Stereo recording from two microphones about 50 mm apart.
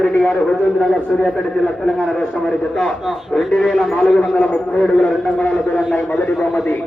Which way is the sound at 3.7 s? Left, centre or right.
Centre.